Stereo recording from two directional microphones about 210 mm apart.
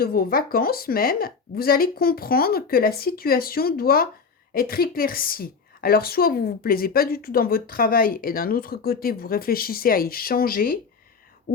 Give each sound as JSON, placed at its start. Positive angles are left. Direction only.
{"t": 0.0, "sound": "a woman's voice", "side_deg": 45}